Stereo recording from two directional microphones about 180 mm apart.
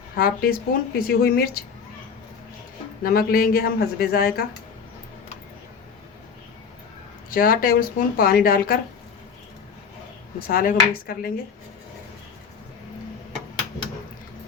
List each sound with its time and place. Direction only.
0.2 s speech: 55° left (ahead or behind)
3.0 s speech: 55° left (ahead or behind)
7.3 s speech: 55° left (ahead or behind)
10.4 s speech: 55° left (ahead or behind)